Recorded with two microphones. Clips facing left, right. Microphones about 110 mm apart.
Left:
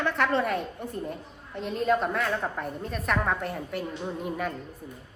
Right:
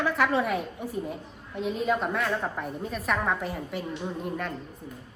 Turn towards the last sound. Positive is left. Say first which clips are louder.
# left 1 dB
turn(degrees=5)  # may be behind; listen again after turning